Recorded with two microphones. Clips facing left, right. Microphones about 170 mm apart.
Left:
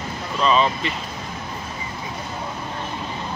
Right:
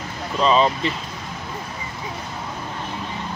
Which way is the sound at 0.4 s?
35° right (ahead or behind).